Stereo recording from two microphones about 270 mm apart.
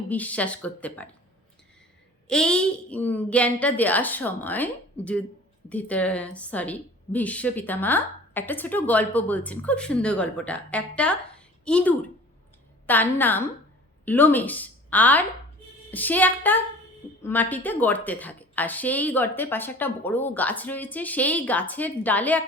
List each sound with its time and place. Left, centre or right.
0.1 s a woman's voice: centre
2.2 s a woman's voice: centre